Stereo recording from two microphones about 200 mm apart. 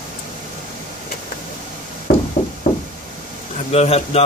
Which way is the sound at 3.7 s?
30° left (ahead or behind).